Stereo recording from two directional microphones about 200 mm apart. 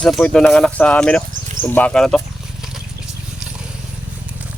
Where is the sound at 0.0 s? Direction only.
5° left (ahead or behind).